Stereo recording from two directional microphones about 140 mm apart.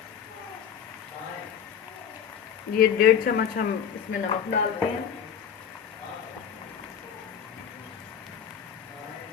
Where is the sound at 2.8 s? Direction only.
90° left.